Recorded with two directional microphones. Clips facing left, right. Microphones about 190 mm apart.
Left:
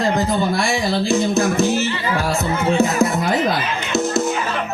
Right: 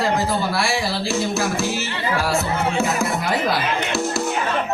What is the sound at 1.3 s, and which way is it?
Music, 20° left (ahead or behind).